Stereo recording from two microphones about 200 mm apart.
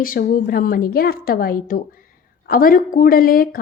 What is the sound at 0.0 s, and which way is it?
Speech, 45° left (ahead or behind).